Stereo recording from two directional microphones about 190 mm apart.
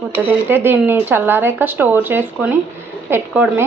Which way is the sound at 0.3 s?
10° right (ahead or behind).